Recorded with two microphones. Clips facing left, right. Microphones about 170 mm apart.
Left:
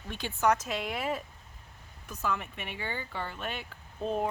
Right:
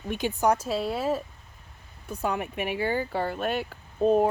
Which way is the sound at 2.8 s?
40° right (ahead or behind).